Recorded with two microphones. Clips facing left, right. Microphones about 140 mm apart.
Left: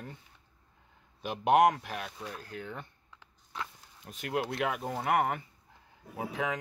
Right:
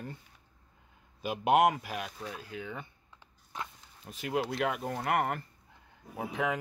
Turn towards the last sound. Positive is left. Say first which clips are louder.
# right 1 dB
turn(degrees=0)  # may be behind; listen again after turning